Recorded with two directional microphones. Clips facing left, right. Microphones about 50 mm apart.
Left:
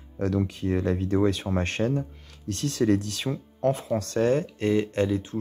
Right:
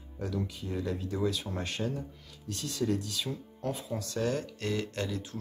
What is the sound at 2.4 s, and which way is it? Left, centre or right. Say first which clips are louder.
Speech: left 8 dB; left.